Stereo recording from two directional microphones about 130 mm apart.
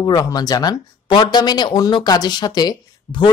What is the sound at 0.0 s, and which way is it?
Speech, 30° left (ahead or behind).